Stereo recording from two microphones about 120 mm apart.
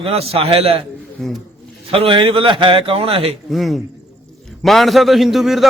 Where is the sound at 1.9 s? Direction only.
45° right (ahead or behind).